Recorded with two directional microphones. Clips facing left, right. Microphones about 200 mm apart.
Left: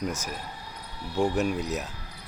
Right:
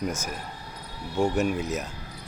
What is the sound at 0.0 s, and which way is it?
Speech, centre (ahead or behind).